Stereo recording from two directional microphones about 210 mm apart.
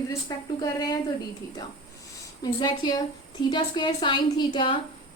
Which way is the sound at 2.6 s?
20° left (ahead or behind).